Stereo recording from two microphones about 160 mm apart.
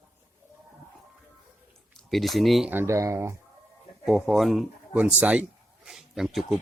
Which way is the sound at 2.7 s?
15° right (ahead or behind).